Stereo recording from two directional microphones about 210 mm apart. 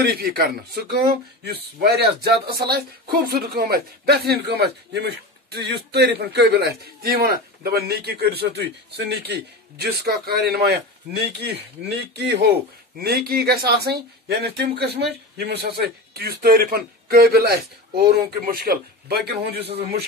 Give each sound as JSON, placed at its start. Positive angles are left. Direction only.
{"t": 0.0, "sound": "speech", "side_deg": -45}